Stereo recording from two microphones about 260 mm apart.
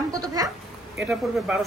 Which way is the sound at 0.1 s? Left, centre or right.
Centre.